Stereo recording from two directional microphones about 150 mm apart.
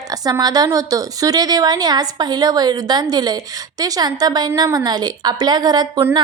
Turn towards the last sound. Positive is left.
turn(degrees=-25)  # may be behind; listen again after turning